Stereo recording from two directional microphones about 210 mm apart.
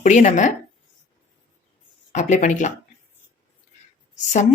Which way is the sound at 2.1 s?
35° left (ahead or behind).